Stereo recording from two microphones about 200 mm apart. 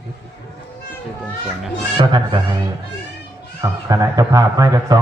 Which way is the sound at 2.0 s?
20° right (ahead or behind).